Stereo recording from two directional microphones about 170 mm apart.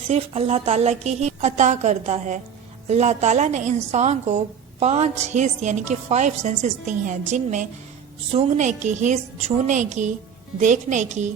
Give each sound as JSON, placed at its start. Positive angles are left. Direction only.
{"t": 0.1, "sound": "a woman's voice", "side_deg": -40}